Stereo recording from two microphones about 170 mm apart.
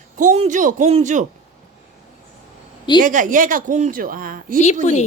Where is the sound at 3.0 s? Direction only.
50° right (ahead or behind).